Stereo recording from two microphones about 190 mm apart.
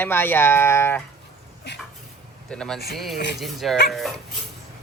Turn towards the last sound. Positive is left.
turn(degrees=0)  # may be behind; listen again after turning